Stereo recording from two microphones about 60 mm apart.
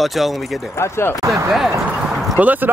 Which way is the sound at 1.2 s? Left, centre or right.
Right.